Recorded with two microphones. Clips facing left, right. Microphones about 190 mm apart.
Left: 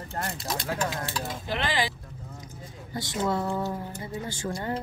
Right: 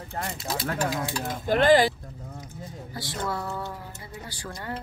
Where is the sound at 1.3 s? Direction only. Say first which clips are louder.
Right 14 dB; 45° right (ahead or behind).